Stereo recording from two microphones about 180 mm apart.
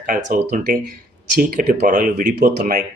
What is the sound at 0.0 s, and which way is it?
Speech, 50° right (ahead or behind).